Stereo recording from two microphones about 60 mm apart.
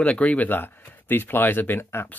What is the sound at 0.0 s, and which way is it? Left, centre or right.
Speech, left.